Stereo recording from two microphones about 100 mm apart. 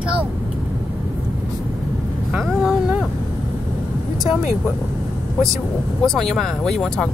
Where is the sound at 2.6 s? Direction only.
10° right (ahead or behind).